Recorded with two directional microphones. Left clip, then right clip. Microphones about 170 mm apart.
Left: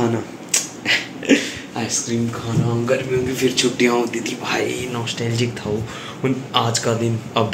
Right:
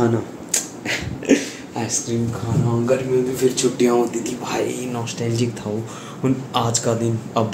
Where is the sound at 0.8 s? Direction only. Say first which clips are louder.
Left 2 dB; centre (ahead or behind).